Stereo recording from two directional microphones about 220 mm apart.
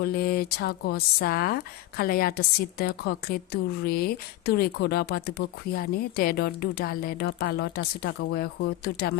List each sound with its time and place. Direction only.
0.0 s a woman's voice: 45° left (ahead or behind)